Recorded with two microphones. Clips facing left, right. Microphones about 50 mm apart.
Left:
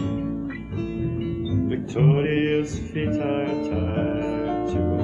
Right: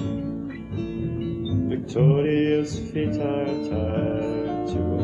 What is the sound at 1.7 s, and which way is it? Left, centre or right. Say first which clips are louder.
Music: right 1 dB; left.